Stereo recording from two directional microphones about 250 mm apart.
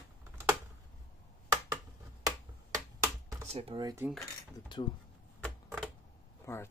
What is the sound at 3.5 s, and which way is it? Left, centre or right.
Speech, right.